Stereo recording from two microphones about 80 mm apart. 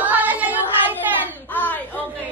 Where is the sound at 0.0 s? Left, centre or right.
Right.